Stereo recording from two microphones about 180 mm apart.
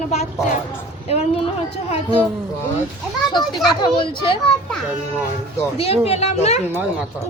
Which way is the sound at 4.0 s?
30° left (ahead or behind).